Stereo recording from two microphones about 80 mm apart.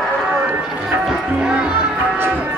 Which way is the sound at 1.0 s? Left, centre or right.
Centre.